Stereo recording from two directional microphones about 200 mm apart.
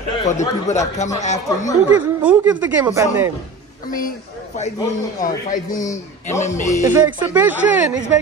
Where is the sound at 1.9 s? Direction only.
10° right (ahead or behind).